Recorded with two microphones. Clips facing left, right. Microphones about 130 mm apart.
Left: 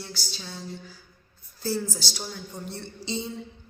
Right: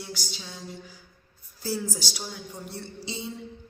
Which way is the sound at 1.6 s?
10° right (ahead or behind).